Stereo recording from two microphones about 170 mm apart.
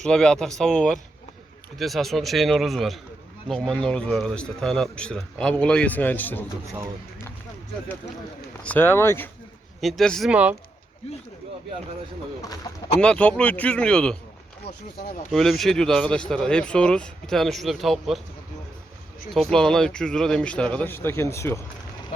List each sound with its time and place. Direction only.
0.0 s a man's voice: 5° left (ahead or behind)
8.6 s speech: 10° left (ahead or behind)
9.8 s a man's voice: centre (ahead or behind)
12.7 s speech: 20° left (ahead or behind)
13.0 s speech: 5° left (ahead or behind)
15.3 s a man's voice: centre (ahead or behind)
19.3 s speech: centre (ahead or behind)